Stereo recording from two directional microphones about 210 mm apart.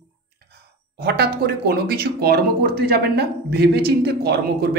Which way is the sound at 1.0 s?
50° right (ahead or behind).